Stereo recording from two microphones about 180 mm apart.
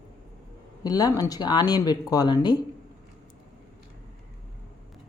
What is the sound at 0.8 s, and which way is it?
Speech, 20° left (ahead or behind).